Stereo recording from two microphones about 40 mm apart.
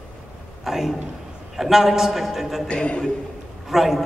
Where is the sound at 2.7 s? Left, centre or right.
Left.